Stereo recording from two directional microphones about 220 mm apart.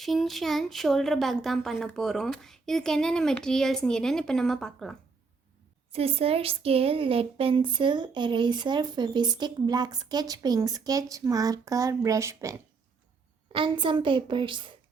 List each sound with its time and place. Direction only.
0.0 s a woman's voice: centre (ahead or behind)
5.9 s speech: 25° right (ahead or behind)